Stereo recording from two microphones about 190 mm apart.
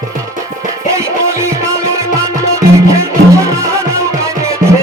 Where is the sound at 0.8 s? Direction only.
15° right (ahead or behind).